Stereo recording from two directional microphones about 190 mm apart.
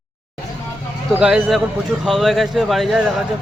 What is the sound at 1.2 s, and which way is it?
Speech, 5° right (ahead or behind).